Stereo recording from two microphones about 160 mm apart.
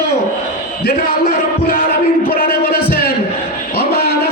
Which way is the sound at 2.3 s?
70° left (ahead or behind).